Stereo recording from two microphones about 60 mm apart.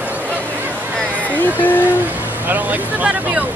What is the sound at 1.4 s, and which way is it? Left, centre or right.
Speech, left.